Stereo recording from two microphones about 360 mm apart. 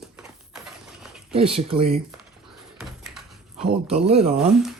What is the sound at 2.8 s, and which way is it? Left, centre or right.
Door, centre.